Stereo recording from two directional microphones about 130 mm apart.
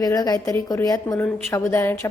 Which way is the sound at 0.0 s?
30° left (ahead or behind).